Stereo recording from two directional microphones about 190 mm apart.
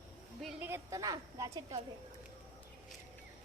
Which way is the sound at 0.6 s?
15° right (ahead or behind).